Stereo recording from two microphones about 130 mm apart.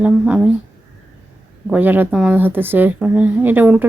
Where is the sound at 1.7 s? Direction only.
15° right (ahead or behind).